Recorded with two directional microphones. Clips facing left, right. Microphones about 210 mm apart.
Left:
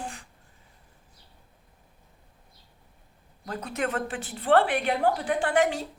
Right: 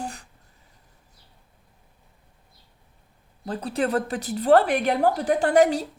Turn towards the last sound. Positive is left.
turn(degrees=-40)  # may be behind; listen again after turning